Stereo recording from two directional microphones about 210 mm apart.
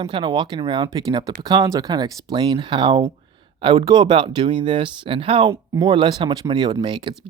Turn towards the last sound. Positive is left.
turn(degrees=-20)  # may be behind; listen again after turning